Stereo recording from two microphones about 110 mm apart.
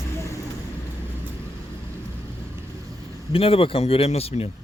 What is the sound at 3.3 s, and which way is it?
Speech, 55° left (ahead or behind).